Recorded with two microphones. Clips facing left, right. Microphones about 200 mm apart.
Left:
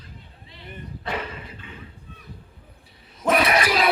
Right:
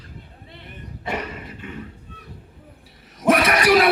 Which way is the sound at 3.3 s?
70° right (ahead or behind).